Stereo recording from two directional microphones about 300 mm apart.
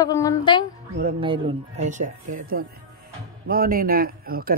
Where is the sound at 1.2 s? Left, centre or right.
Centre.